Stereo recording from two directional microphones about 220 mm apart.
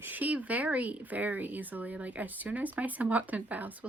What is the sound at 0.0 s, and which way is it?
Speech, 10° right (ahead or behind).